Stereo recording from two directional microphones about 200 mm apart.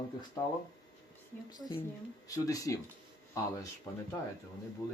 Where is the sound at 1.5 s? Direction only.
20° left (ahead or behind).